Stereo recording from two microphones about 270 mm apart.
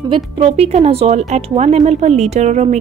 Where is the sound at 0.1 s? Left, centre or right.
Right.